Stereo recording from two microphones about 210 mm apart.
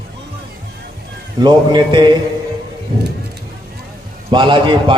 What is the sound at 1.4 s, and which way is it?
Speech, 20° right (ahead or behind).